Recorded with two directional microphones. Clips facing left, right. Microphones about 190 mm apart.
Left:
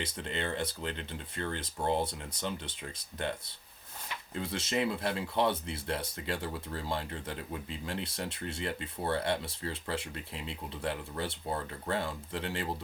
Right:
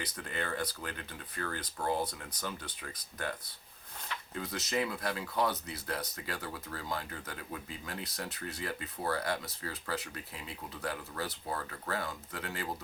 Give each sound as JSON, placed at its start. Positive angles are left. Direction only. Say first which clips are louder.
{"t": 0.0, "sound": "speech", "louder": "left 3 dB", "side_deg": 25}
{"t": 4.4, "sound": "speech", "louder": "left 2 dB", "side_deg": 30}